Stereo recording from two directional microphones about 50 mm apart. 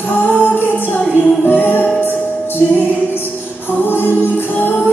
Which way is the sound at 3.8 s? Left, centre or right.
Left.